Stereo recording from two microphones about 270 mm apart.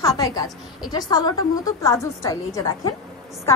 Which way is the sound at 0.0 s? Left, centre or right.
Centre.